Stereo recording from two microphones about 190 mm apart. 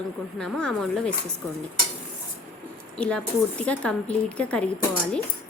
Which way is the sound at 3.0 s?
5° left (ahead or behind).